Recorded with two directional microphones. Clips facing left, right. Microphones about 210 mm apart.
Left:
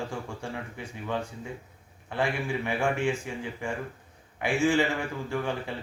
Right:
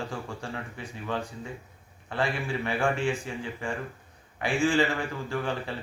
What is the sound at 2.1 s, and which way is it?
A man's voice, 15° left (ahead or behind).